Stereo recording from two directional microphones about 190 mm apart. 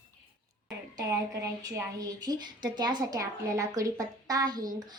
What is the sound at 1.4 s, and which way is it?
A woman's voice, 15° right (ahead or behind).